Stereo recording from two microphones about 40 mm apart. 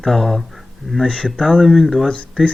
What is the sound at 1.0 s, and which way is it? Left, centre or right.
Speech, left.